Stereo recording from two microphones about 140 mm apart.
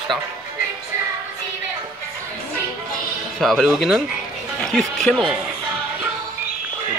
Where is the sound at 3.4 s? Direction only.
Centre (ahead or behind).